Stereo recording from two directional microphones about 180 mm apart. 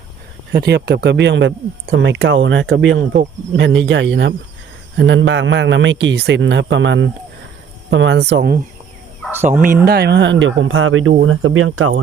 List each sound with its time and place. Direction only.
0.5 s speech: 65° right (ahead or behind)
9.5 s speech: 50° right (ahead or behind)
9.8 s speech: 60° right (ahead or behind); by 11.1 s 90° right
11.1 s speech: 75° right (ahead or behind)